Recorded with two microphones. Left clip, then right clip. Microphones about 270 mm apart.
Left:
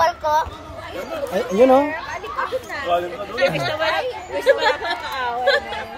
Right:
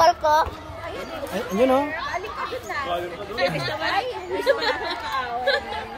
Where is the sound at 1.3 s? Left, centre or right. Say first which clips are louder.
Left 6 dB; centre.